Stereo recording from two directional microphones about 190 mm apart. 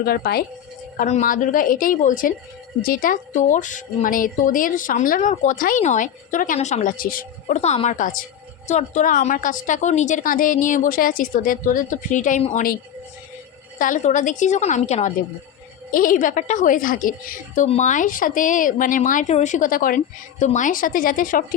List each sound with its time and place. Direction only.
0.0 s speech: 55° left (ahead or behind)
0.9 s a woman's voice: 40° left (ahead or behind)